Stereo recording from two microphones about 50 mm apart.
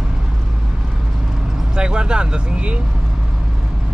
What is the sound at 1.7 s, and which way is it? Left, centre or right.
Speech, centre.